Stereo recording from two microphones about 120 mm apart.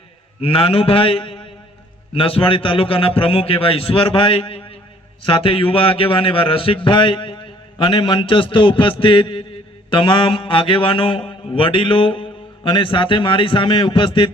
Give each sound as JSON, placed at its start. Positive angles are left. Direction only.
{"t": 0.4, "sound": "a man's voice", "side_deg": 50}